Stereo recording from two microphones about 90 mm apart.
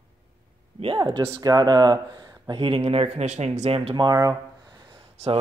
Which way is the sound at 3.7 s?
90° right.